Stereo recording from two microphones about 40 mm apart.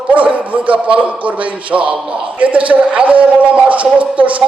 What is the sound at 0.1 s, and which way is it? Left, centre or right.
Speech, right.